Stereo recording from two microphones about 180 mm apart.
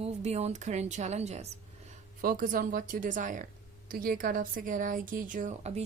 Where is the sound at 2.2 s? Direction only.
50° right (ahead or behind).